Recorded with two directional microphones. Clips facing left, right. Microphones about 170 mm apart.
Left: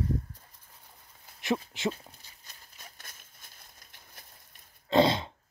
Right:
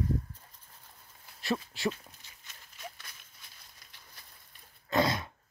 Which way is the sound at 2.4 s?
45° left (ahead or behind).